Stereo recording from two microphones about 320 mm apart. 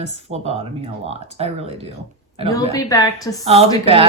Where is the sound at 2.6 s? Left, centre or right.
Centre.